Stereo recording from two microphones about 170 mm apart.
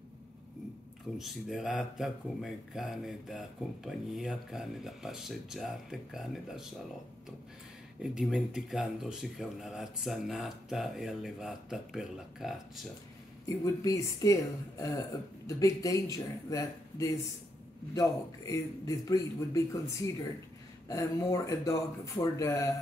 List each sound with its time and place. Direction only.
1.1 s speech: centre (ahead or behind)
8.0 s speech: 5° right (ahead or behind)
13.5 s speech: 20° left (ahead or behind)
20.9 s speech: 20° left (ahead or behind)